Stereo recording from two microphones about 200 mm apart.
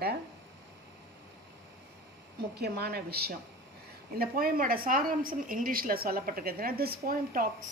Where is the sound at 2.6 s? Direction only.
50° right (ahead or behind).